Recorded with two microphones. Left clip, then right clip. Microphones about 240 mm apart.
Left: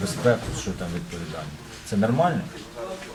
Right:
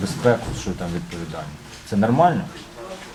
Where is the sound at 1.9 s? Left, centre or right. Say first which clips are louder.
Right 3 dB; centre.